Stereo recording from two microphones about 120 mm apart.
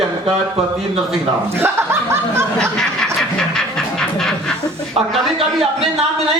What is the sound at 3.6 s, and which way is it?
Music, 5° left (ahead or behind).